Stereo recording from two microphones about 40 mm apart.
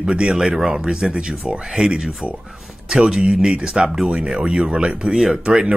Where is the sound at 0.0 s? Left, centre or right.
Right.